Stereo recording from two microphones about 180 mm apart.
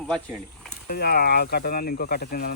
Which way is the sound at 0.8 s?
60° left (ahead or behind).